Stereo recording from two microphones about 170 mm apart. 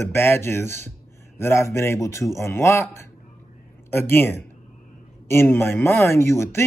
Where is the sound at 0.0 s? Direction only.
15° left (ahead or behind).